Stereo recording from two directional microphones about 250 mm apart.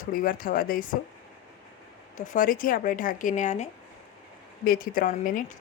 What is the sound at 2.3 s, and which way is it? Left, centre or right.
Speech, left.